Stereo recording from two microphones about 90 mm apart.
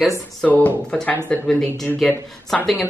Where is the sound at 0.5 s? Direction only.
20° left (ahead or behind).